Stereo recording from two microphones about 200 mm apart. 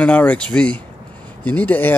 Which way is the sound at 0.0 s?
5° left (ahead or behind).